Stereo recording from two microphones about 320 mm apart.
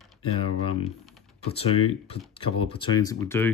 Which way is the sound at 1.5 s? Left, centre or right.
Centre.